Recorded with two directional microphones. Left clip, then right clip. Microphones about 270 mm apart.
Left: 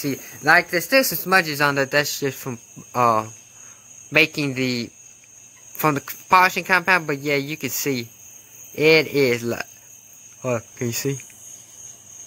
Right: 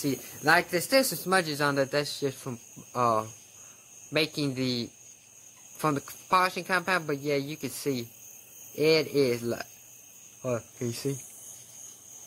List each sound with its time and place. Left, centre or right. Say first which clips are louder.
0.0 s speech: left 6 dB; centre
5.8 s speech: left 8 dB; left